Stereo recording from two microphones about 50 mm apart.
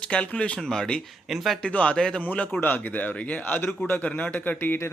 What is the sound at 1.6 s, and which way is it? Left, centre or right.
Speech, left.